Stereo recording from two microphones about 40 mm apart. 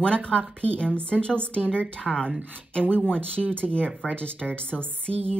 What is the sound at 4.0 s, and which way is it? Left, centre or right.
Speech, left.